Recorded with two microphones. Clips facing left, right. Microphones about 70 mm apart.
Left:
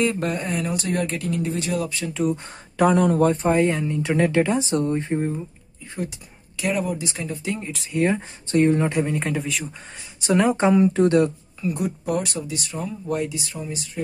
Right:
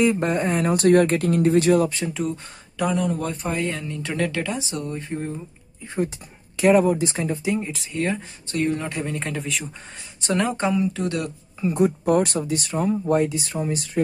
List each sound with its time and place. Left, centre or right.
0.2 s speech: right
1.9 s speech: right
2.8 s speech: left
3.2 s speech: left
4.6 s speech: left
5.9 s speech: right
7.5 s a man's voice: centre
8.0 s speech: left
9.0 s a man's voice: centre
10.7 s speech: left
11.6 s speech: right